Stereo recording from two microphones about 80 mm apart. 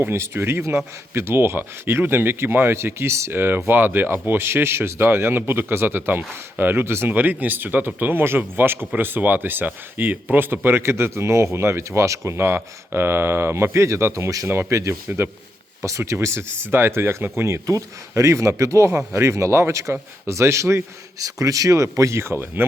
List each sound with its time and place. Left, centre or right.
0.0 s speech: right